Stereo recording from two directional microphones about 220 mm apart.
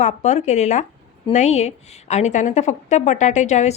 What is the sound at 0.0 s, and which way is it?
A woman's voice, 30° left (ahead or behind).